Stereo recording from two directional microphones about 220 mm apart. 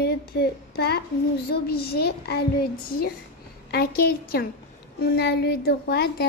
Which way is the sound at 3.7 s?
45° left (ahead or behind).